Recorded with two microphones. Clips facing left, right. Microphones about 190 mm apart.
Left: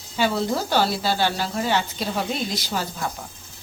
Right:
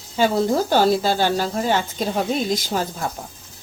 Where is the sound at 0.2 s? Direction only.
45° right (ahead or behind).